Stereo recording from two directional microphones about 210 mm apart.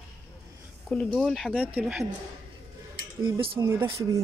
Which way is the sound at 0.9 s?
5° left (ahead or behind).